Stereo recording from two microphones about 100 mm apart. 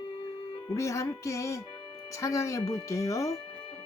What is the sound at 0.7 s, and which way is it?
Speech, 30° left (ahead or behind).